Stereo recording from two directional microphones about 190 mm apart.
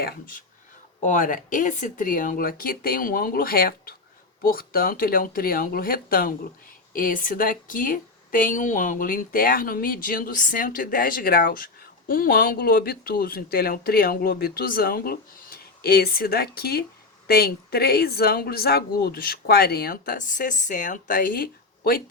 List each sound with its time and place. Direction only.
0.0 s a woman's voice: 45° left (ahead or behind)